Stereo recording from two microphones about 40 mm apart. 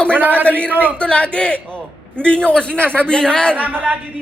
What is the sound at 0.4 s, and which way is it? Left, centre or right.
Speech, left.